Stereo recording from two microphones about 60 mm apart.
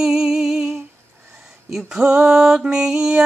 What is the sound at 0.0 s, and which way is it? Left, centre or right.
Humming, centre.